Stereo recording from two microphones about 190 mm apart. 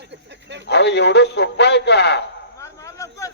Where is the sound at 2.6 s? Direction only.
15° left (ahead or behind).